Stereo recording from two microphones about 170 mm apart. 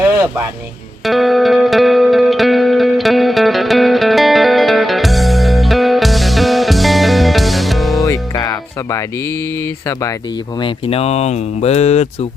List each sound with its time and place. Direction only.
1.0 s music: centre (ahead or behind)
8.0 s music: 20° left (ahead or behind)
9.8 s speech: 20° left (ahead or behind)
10.6 s speech: 35° left (ahead or behind)